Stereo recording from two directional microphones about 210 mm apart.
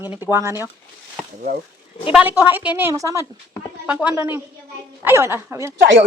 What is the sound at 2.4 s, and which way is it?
A woman's voice, 10° right (ahead or behind).